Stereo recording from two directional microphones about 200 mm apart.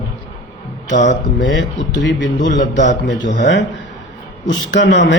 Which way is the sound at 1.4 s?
65° left (ahead or behind).